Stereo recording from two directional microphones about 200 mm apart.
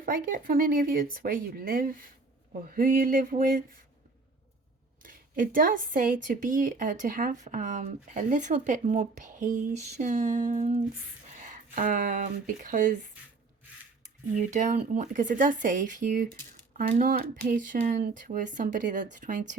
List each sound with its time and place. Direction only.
0.0 s speech: 45° right (ahead or behind)
5.0 s speech: 45° right (ahead or behind)
14.5 s speech: 40° right (ahead or behind)